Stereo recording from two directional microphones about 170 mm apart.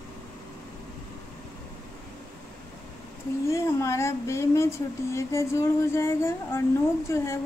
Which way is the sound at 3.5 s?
15° left (ahead or behind).